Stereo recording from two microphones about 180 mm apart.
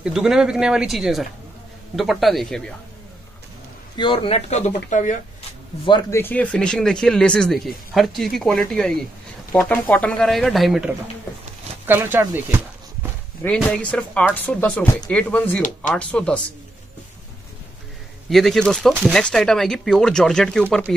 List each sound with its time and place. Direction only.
0.0 s speech: 5° right (ahead or behind)
3.9 s a man's voice: 25° left (ahead or behind); by 5.2 s 45° left (ahead or behind)
5.9 s speech: 25° left (ahead or behind)
6.1 s speech: 10° left (ahead or behind); by 13.1 s 10° right (ahead or behind)
13.4 s speech: 10° left (ahead or behind)
18.3 s speech: centre (ahead or behind)